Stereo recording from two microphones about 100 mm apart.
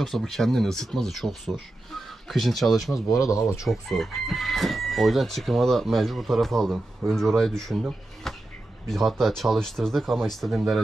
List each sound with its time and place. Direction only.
0.0 s chicken: 5° left (ahead or behind)
3.3 s speech: 35° left (ahead or behind)
3.6 s chicken: centre (ahead or behind)
8.8 s chicken: 5° left (ahead or behind)